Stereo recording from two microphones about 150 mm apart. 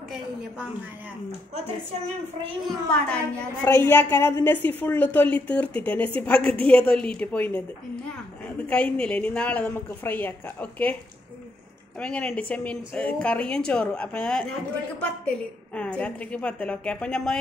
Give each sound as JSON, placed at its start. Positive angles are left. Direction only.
{"t": 2.9, "sound": "a woman's voice", "side_deg": 5}
{"t": 8.6, "sound": "a woman's voice", "side_deg": 10}
{"t": 12.0, "sound": "a woman's voice", "side_deg": 5}